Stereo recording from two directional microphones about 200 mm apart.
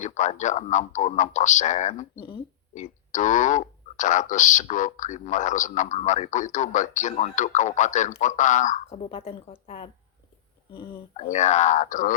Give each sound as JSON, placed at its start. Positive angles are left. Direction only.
{"t": 0.0, "sound": "speech", "side_deg": 35}
{"t": 11.3, "sound": "speech", "side_deg": 35}